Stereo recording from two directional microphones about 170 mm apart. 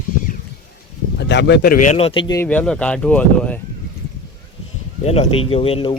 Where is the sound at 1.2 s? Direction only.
90° left; by 1.9 s 50° left (ahead or behind).